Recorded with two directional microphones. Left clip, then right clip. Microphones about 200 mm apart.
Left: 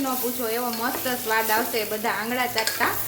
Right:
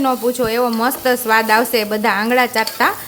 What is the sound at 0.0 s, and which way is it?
Speech, 60° right (ahead or behind).